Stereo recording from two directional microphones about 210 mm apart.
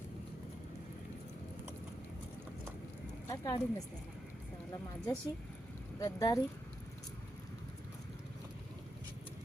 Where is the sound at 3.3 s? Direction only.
20° left (ahead or behind).